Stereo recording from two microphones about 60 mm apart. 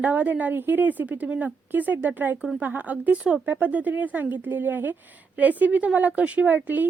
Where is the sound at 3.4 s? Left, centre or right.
Right.